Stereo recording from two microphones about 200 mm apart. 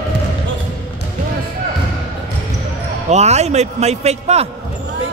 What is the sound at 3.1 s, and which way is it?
A man's voice, 35° right (ahead or behind).